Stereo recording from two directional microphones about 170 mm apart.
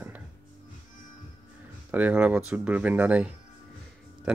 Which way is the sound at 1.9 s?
10° right (ahead or behind).